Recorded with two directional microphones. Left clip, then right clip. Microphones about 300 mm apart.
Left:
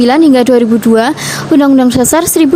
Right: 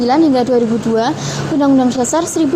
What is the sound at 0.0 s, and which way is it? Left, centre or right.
A woman's voice, left.